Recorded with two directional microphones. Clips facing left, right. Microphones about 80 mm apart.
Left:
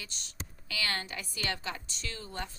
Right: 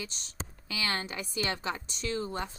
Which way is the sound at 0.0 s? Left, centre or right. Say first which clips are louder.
Right 5 dB; right.